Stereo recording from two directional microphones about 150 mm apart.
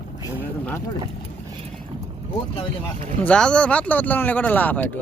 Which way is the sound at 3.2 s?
5° left (ahead or behind).